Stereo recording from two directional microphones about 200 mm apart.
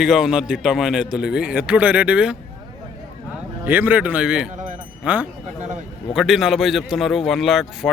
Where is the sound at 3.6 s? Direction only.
10° right (ahead or behind).